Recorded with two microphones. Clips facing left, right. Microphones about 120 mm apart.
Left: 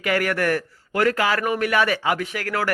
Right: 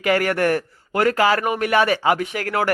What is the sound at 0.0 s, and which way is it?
A man's voice, 30° right (ahead or behind).